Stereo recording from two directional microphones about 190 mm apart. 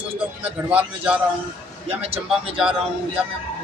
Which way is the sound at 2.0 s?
30° right (ahead or behind).